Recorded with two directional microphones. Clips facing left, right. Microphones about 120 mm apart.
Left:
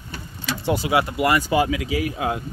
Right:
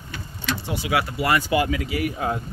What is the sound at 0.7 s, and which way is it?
Speech, 35° left (ahead or behind).